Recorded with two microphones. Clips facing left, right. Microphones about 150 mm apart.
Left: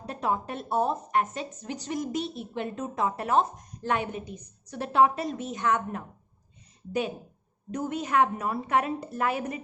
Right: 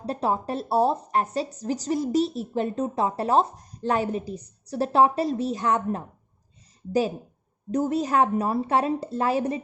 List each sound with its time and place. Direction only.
0.0 s a woman's voice: 30° right (ahead or behind)
7.7 s a woman's voice: 35° right (ahead or behind)